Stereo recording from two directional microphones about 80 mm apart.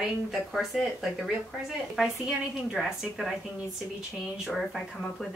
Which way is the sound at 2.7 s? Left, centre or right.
Centre.